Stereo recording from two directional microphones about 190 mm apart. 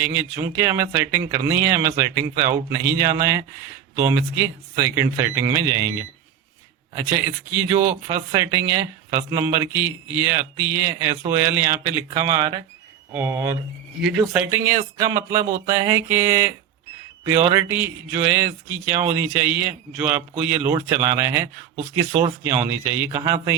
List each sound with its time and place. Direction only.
0.0 s speech: 10° right (ahead or behind)